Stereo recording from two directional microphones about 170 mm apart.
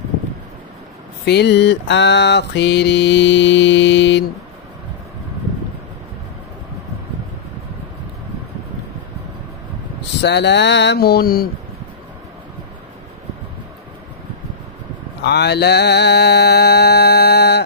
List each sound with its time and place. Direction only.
1.2 s mantra: 85° left
10.2 s mantra: 90° left; by 11.4 s 65° left (ahead or behind)
15.2 s mantra: 80° left